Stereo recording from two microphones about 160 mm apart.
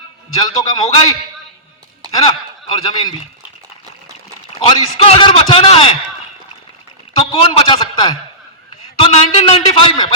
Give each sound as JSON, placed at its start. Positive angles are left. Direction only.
{"t": 0.3, "sound": "a man's voice", "side_deg": 25}
{"t": 2.0, "sound": "a man's voice", "side_deg": 30}
{"t": 4.6, "sound": "a man's voice", "side_deg": 35}
{"t": 7.4, "sound": "a man's voice", "side_deg": 30}